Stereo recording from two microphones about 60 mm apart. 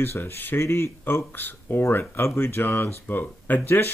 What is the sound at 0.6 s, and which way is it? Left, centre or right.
Speech, left.